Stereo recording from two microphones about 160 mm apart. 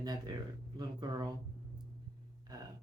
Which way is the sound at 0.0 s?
25° right (ahead or behind).